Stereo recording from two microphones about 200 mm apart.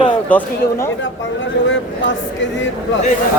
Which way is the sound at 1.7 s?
65° left (ahead or behind).